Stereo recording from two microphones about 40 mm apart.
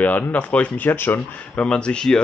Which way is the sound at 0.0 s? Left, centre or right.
Left.